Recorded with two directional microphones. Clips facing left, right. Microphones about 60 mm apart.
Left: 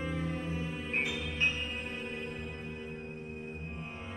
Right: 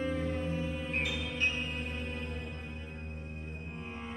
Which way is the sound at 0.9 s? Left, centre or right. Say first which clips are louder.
Left 4 dB; centre.